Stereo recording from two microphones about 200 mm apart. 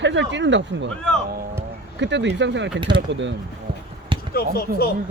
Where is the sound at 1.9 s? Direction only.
65° right (ahead or behind).